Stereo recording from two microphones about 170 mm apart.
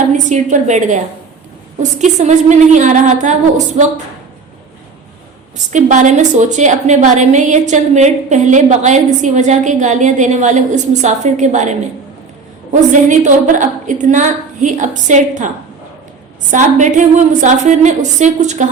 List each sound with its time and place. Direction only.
0.1 s a woman's voice: 45° right (ahead or behind)
5.5 s a woman's voice: 45° right (ahead or behind)
16.5 s a woman's voice: 45° right (ahead or behind)